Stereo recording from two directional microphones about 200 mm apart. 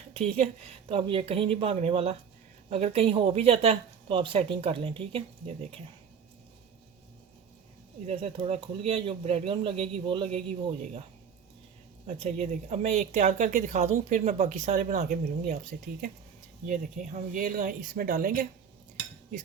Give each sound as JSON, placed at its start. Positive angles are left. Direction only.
{"t": 0.1, "sound": "a woman's voice", "side_deg": -30}
{"t": 8.0, "sound": "a woman's voice", "side_deg": -30}
{"t": 12.0, "sound": "speech", "side_deg": -30}
{"t": 16.6, "sound": "speech", "side_deg": -40}